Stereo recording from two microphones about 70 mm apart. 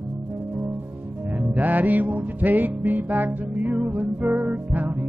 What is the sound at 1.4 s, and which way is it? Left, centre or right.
Music, right.